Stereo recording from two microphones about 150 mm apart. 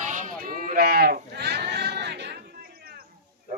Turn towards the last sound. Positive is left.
turn(degrees=-90)